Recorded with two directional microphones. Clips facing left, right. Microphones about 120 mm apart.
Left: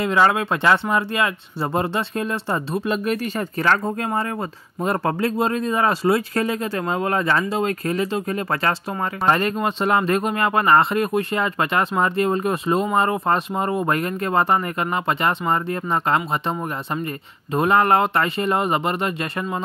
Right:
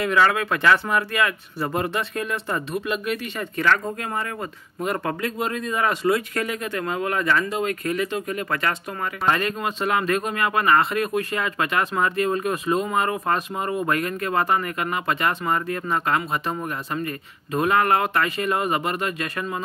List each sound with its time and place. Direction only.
0.0 s speech: 25° left (ahead or behind)